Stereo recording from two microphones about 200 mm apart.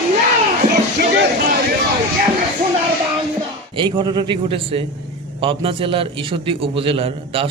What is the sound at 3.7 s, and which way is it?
A man's voice, 20° right (ahead or behind).